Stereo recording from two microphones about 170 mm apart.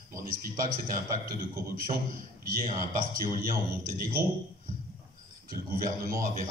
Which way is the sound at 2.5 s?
55° right (ahead or behind).